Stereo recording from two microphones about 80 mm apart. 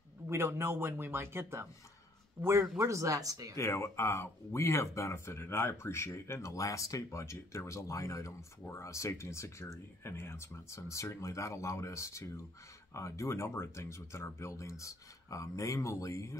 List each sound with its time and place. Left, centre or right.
0.3 s speech: right
3.5 s speech: left